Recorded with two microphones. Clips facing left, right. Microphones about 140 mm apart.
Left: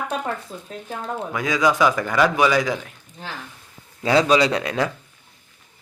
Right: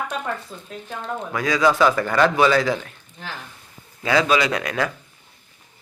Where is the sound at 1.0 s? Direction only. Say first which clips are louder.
Right 1 dB; 15° left (ahead or behind).